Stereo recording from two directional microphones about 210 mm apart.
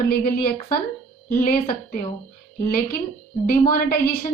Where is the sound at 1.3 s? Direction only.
40° left (ahead or behind).